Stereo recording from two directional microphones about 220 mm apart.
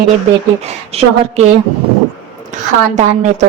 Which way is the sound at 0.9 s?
30° right (ahead or behind).